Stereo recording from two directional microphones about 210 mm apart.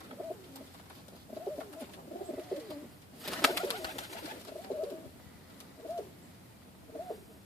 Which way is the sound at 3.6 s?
20° left (ahead or behind).